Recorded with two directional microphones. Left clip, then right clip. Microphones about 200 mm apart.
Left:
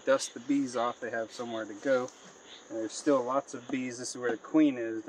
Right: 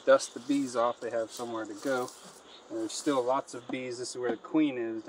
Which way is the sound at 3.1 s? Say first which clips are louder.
Left 1 dB; 5° left (ahead or behind).